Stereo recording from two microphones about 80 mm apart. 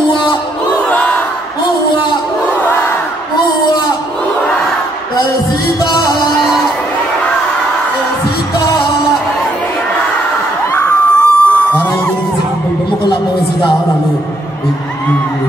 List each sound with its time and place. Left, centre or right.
0.8 s crowd: centre
5.9 s music: left
10.9 s a sound: centre